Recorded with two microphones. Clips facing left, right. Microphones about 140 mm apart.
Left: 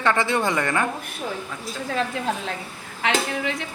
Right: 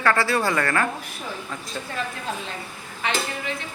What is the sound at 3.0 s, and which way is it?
Speech, 90° left.